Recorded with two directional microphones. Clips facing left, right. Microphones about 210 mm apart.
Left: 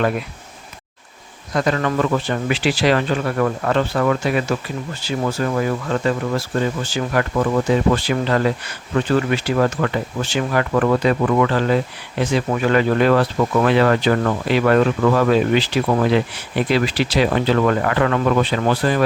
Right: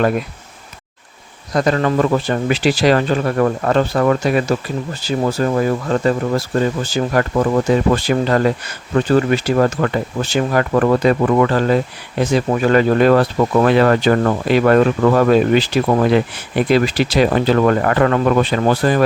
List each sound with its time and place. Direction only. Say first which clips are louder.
1.5 s speech: right 3 dB; 35° right (ahead or behind)